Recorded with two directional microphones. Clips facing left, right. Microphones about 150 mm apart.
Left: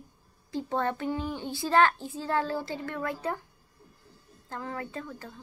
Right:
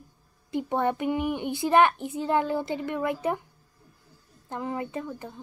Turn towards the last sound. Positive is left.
turn(degrees=-15)  # may be behind; listen again after turning